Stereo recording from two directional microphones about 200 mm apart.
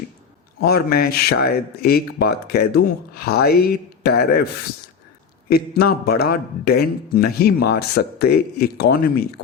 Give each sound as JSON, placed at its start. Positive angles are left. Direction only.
{"t": 0.6, "sound": "a man's voice", "side_deg": 50}
{"t": 5.5, "sound": "a man's voice", "side_deg": 50}